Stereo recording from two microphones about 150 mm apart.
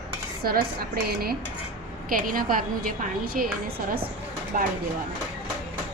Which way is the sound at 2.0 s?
70° right (ahead or behind).